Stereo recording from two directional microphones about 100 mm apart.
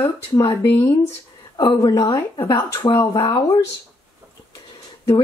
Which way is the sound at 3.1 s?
45° left (ahead or behind).